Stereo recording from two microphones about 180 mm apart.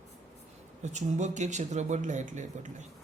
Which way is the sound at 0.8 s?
40° right (ahead or behind).